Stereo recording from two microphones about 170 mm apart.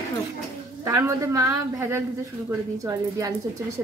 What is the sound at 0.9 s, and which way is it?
A woman's voice, 20° right (ahead or behind).